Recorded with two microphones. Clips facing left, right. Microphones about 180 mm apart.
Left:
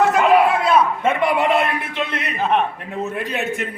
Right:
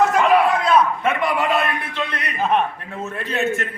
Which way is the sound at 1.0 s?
25° left (ahead or behind).